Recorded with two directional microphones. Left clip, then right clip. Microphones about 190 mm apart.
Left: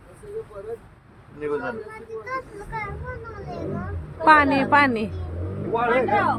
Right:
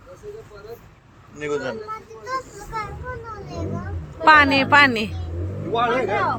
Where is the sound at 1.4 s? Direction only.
50° right (ahead or behind).